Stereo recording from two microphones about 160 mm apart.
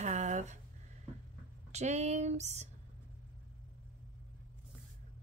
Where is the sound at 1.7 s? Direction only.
45° right (ahead or behind).